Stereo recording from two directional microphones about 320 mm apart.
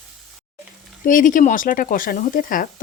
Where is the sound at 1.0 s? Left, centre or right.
Left.